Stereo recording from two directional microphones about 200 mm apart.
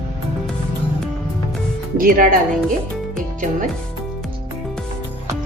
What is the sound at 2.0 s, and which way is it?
Speech, 45° right (ahead or behind).